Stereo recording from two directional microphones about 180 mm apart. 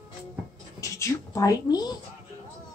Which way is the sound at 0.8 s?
15° left (ahead or behind).